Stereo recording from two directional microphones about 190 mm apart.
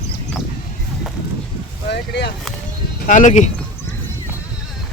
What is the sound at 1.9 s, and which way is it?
Speech, 60° left (ahead or behind).